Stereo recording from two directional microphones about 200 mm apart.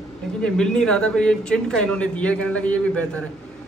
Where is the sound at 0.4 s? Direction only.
5° left (ahead or behind).